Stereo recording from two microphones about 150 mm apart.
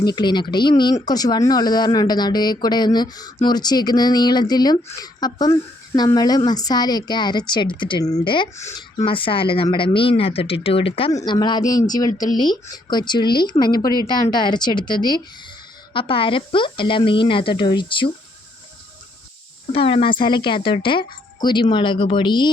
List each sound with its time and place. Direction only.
0.0 s speech: 30° left (ahead or behind)
8.5 s speech: 20° left (ahead or behind)
9.0 s speech: 35° left (ahead or behind)
11.1 s speech: 25° left (ahead or behind)
19.7 s speech: 40° left (ahead or behind)